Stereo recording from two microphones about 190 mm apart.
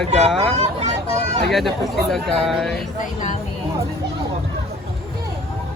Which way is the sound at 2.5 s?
Centre (ahead or behind).